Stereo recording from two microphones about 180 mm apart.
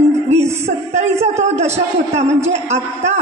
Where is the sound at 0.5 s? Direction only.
40° right (ahead or behind).